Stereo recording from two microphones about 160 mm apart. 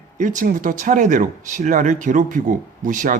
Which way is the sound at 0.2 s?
55° right (ahead or behind).